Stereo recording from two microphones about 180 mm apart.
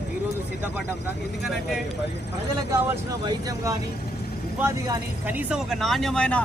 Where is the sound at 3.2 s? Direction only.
20° right (ahead or behind).